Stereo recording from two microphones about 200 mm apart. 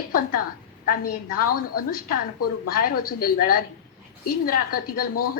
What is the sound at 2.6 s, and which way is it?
A woman's voice, 45° left (ahead or behind).